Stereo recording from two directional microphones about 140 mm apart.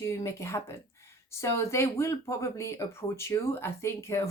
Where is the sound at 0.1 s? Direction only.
20° left (ahead or behind).